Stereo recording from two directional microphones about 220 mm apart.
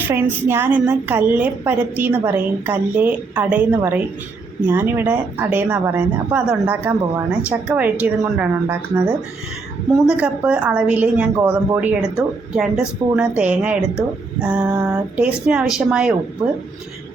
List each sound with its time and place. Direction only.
0.1 s a woman's voice: 10° right (ahead or behind)
16.4 s a woman's voice: 15° right (ahead or behind)